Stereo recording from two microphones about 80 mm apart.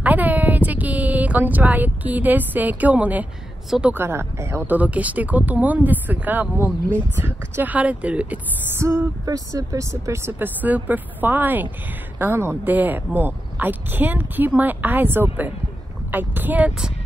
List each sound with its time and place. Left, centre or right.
0.0 s a sound: right
3.9 s speech: right
4.7 s speech: centre
8.7 s speech: right
10.4 s speech: right